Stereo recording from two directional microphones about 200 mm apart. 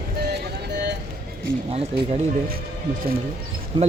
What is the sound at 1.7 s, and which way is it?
Speech, 30° right (ahead or behind).